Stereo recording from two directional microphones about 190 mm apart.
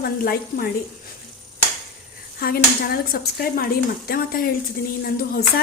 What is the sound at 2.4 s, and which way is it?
A woman's voice, 50° left (ahead or behind).